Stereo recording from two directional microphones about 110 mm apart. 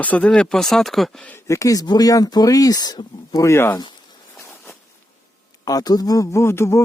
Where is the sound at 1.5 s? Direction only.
30° left (ahead or behind).